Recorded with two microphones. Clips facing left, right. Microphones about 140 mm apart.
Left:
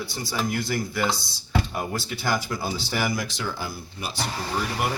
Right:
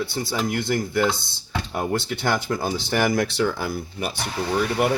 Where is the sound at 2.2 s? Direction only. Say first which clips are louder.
Right 1 dB; 60° right (ahead or behind).